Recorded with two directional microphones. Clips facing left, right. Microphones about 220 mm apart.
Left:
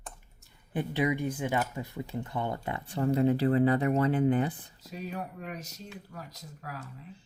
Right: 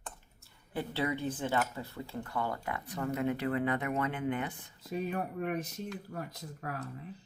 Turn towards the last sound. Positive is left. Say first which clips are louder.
# right 3 dB
turn(degrees=-55)  # may be behind; listen again after turning